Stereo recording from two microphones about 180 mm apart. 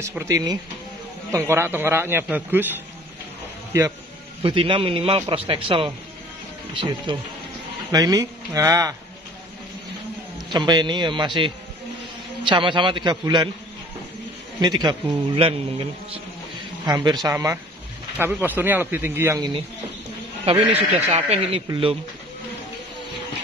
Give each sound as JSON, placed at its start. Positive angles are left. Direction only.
{"t": 0.0, "sound": "speech", "side_deg": -15}
{"t": 4.4, "sound": "a man's voice", "side_deg": -30}
{"t": 10.5, "sound": "a man's voice", "side_deg": -25}
{"t": 14.6, "sound": "a man's voice", "side_deg": -25}
{"t": 20.7, "sound": "a man's voice", "side_deg": -35}